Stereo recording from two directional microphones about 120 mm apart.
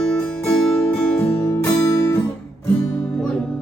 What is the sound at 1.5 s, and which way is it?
Music, 20° left (ahead or behind).